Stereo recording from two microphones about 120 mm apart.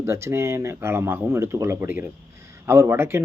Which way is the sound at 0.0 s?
20° right (ahead or behind).